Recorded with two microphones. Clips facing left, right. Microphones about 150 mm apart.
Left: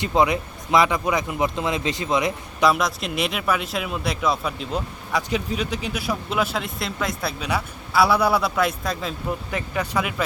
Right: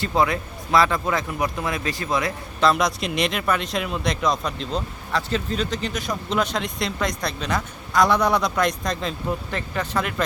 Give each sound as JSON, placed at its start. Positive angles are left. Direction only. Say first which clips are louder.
{"t": 0.0, "sound": "speech", "louder": "left 2 dB", "side_deg": 20}
{"t": 2.7, "sound": "speech", "louder": "right 2 dB", "side_deg": 0}